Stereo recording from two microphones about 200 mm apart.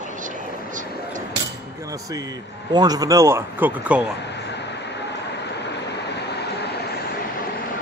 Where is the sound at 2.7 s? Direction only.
20° right (ahead or behind).